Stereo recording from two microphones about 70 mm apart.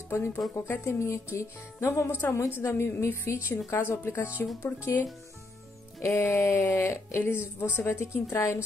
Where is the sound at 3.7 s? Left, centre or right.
Left.